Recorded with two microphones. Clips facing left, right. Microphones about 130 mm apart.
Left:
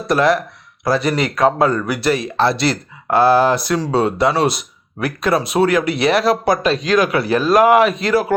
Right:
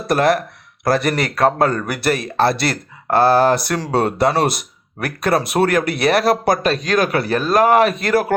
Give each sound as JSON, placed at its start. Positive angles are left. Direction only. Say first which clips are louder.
{"t": 0.1, "sound": "speech", "louder": "left 1 dB", "side_deg": -55}